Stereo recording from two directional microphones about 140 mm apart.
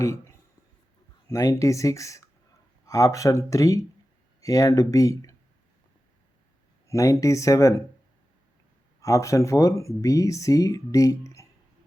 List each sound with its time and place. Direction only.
0.0 s speech: 20° left (ahead or behind)
6.8 s speech: 20° left (ahead or behind)
9.0 s speech: 20° left (ahead or behind)